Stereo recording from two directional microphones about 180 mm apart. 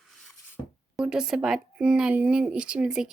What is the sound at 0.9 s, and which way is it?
Speech, 5° right (ahead or behind).